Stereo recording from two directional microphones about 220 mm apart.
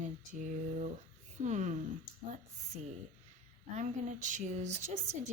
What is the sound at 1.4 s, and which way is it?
Speech, 35° right (ahead or behind).